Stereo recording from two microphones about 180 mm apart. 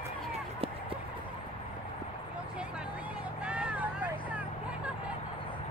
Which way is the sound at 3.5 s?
5° right (ahead or behind).